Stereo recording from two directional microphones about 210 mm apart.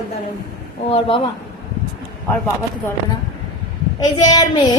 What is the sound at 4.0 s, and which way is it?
Speech, 20° left (ahead or behind).